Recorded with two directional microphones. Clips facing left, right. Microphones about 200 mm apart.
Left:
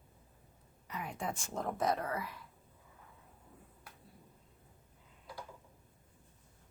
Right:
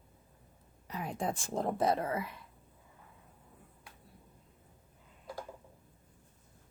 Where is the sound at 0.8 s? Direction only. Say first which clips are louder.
Right 4 dB; 35° right (ahead or behind).